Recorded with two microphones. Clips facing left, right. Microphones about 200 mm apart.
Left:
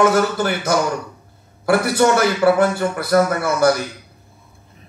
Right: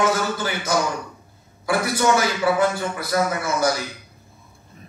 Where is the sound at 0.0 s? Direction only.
60° left (ahead or behind).